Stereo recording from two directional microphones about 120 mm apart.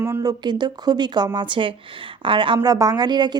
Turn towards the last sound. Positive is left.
turn(degrees=-35)  # may be behind; listen again after turning